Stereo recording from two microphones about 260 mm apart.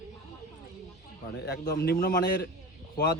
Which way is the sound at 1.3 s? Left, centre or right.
Left.